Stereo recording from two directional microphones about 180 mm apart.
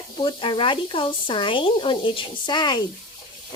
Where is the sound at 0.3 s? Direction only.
25° left (ahead or behind).